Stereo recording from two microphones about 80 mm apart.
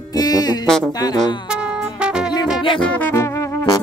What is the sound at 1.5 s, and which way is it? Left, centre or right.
Music, centre.